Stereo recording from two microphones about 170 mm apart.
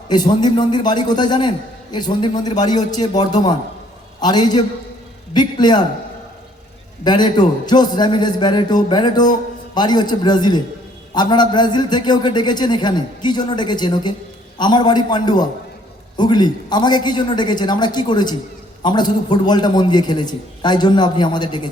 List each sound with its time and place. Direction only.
0.1 s a man's voice: 25° left (ahead or behind)
7.0 s a man's voice: 25° left (ahead or behind)